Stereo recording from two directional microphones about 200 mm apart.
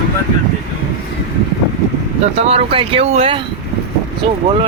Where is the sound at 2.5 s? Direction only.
30° right (ahead or behind).